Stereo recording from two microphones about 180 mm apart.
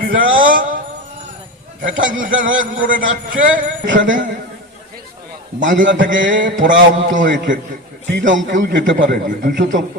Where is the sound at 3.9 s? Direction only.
90° right.